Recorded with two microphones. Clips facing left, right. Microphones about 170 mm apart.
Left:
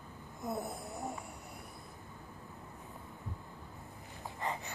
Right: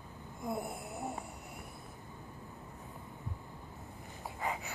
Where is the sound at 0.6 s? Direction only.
10° right (ahead or behind).